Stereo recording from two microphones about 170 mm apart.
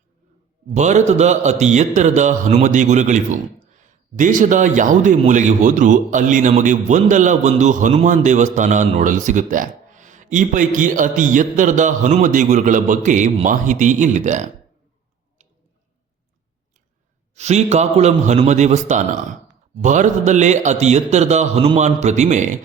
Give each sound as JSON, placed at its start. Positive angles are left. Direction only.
{"t": 0.7, "sound": "a man's voice", "side_deg": -45}
{"t": 17.3, "sound": "a man's voice", "side_deg": -40}